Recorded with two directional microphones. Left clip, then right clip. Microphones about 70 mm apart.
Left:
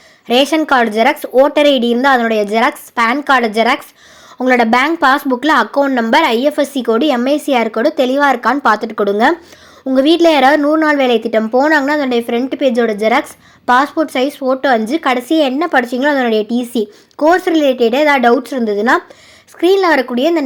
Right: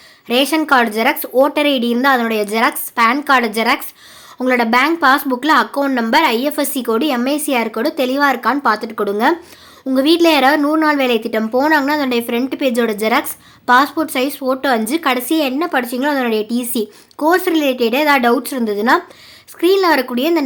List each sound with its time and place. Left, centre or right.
0.3 s speech: left
5.8 s speech: left
6.1 s speech: left
9.9 s speech: left
15.4 s speech: left